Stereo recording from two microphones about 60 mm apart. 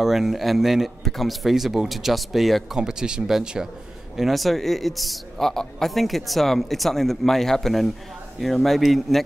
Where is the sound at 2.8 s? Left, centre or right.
Centre.